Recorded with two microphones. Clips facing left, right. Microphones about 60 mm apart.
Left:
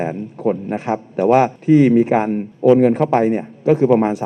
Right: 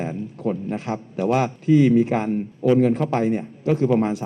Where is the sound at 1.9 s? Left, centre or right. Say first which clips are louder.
Left 5 dB; centre.